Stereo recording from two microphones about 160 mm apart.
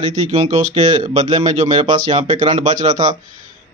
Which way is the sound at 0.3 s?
40° right (ahead or behind).